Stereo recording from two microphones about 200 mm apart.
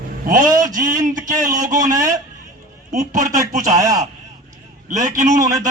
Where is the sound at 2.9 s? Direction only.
35° right (ahead or behind).